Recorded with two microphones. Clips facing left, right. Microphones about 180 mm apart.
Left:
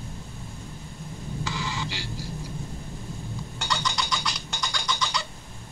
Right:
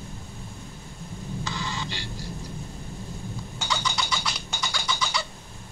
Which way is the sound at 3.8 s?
5° right (ahead or behind).